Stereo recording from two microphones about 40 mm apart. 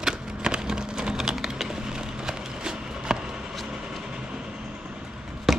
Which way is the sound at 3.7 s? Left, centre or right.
Centre.